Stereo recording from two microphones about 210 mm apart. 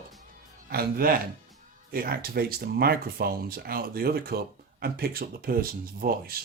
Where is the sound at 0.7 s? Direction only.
45° right (ahead or behind).